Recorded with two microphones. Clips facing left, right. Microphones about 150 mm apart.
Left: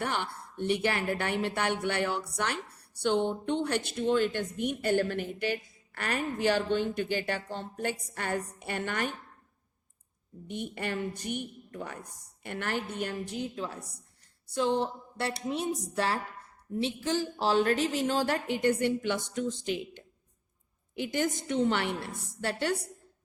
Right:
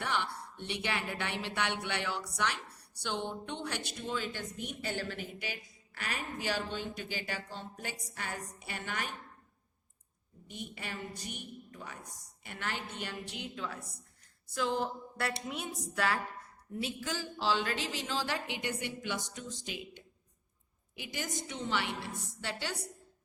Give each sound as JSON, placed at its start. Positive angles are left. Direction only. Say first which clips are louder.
{"t": 0.0, "sound": "speech", "louder": "left 2 dB", "side_deg": 50}
{"t": 10.5, "sound": "a woman's voice", "louder": "left 9 dB", "side_deg": 55}
{"t": 14.5, "sound": "a woman's voice", "louder": "left 5 dB", "side_deg": 30}
{"t": 17.3, "sound": "a woman's voice", "louder": "left 6 dB", "side_deg": 45}